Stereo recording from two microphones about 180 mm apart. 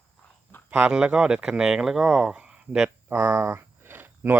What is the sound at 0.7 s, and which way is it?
Speech, 5° right (ahead or behind).